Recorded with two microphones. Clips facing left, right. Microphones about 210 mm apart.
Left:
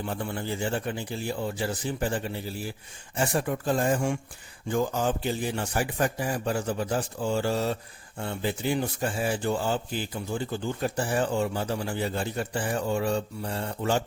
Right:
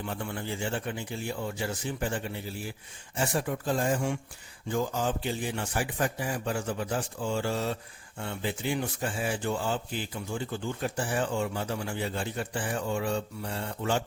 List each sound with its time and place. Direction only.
0.0 s a man's voice: 35° left (ahead or behind)
3.2 s a man's voice: 55° left (ahead or behind)